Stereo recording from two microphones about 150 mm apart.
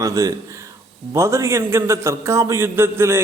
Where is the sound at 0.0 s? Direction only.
20° right (ahead or behind).